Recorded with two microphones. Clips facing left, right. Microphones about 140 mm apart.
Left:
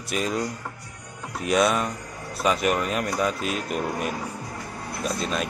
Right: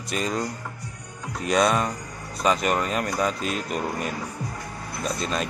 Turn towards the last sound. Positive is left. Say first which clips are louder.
# even
turn(degrees=5)  # may be behind; listen again after turning